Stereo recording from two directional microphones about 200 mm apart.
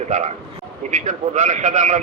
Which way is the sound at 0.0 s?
35° right (ahead or behind).